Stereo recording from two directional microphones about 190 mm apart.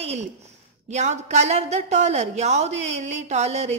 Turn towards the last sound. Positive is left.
turn(degrees=-35)  # may be behind; listen again after turning